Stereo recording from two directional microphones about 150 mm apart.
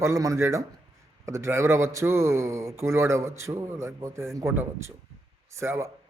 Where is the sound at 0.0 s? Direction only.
20° right (ahead or behind).